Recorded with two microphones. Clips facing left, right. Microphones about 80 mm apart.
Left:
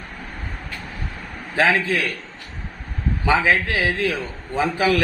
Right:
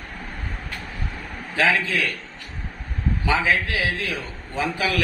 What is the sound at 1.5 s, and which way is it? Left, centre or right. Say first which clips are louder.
Speech: left 2 dB; left.